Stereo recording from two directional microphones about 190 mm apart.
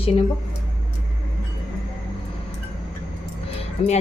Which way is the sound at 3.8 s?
30° left (ahead or behind).